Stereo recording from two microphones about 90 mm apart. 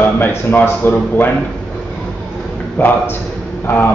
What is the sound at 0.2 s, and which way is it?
A man's voice, 25° left (ahead or behind).